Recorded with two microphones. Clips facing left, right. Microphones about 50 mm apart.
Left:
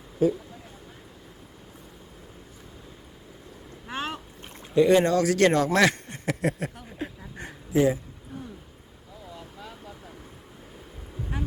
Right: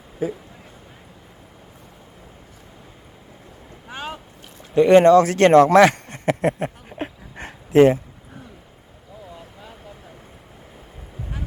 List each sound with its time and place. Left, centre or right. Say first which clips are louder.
3.8 s boat: even; centre
4.7 s speech: right 8 dB; right
5.8 s a sound: right 7 dB; right
9.3 s vehicle: right 1 dB; centre